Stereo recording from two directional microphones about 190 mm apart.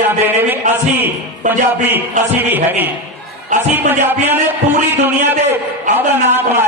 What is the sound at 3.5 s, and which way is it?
Speech, 40° right (ahead or behind).